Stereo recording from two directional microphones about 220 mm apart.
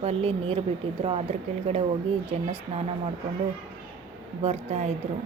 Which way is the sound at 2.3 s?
30° right (ahead or behind).